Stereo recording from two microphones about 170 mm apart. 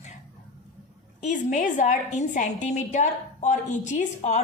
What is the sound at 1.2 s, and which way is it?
A woman's voice, 45° left (ahead or behind).